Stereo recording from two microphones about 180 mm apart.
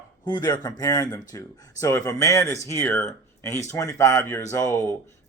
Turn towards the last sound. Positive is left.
turn(degrees=15)  # may be behind; listen again after turning